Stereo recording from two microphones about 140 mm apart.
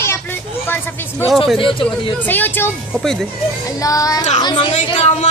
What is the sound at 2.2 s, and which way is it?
Speech, 15° left (ahead or behind).